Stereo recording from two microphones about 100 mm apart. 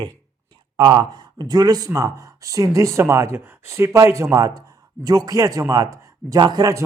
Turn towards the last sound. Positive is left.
turn(degrees=-35)  # may be behind; listen again after turning